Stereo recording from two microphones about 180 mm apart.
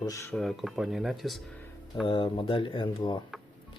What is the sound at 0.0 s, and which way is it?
Speech, 15° left (ahead or behind).